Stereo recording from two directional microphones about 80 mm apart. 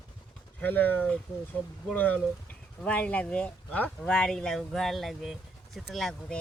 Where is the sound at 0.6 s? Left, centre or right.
Left; by 6.1 s centre.